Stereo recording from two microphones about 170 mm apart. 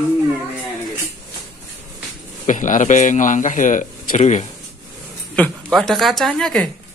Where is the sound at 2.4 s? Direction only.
50° left (ahead or behind).